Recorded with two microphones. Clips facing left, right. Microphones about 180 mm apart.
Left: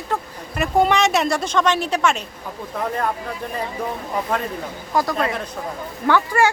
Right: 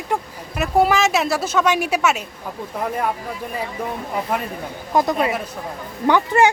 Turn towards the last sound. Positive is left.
turn(degrees=-20)  # may be behind; listen again after turning